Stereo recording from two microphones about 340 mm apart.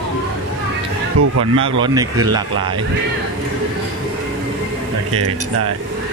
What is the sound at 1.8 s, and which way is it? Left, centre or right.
Speech, centre.